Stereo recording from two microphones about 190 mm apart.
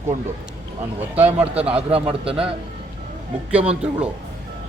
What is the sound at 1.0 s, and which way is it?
Speech, 10° right (ahead or behind).